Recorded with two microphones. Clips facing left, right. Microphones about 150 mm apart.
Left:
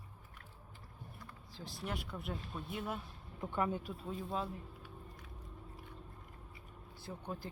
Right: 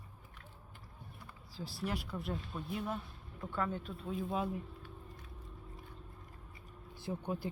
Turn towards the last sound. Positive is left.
turn(degrees=-10)  # may be behind; listen again after turning